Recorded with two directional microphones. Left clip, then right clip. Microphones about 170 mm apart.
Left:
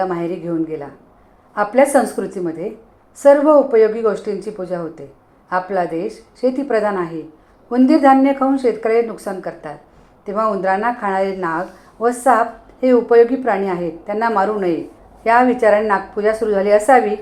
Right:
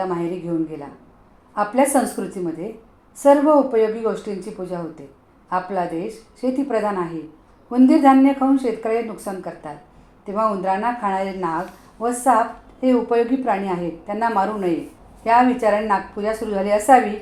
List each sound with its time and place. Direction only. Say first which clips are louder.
0.1 s a woman's voice: left 3 dB; 25° left (ahead or behind)